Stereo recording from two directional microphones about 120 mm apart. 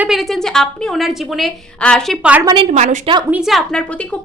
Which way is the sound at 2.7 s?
75° right (ahead or behind).